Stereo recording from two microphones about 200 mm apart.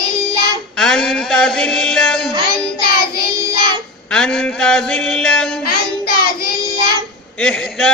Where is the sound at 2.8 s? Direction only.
50° left (ahead or behind).